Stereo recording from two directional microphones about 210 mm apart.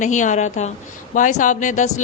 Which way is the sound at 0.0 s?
35° left (ahead or behind).